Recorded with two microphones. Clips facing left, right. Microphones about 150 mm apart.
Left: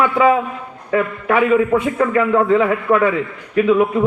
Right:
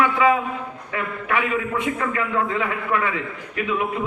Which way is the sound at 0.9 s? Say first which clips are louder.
Left 9 dB; 35° left (ahead or behind).